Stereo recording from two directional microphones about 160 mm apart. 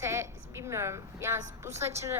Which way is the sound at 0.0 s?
15° right (ahead or behind).